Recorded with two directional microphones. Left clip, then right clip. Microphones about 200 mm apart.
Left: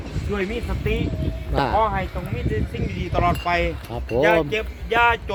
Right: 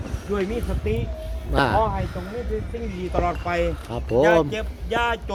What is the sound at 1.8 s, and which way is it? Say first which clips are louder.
Speech: left 2 dB; 15° left (ahead or behind).